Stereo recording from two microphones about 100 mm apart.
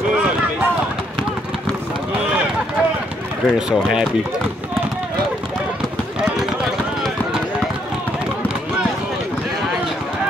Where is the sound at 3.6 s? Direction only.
5° right (ahead or behind).